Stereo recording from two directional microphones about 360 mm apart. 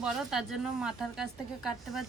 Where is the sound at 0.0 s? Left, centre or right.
Centre.